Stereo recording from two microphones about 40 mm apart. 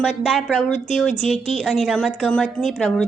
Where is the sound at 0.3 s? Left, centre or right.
Centre.